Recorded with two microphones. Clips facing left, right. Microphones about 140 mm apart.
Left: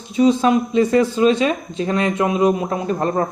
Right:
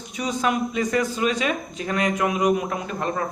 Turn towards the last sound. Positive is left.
turn(degrees=35)  # may be behind; listen again after turning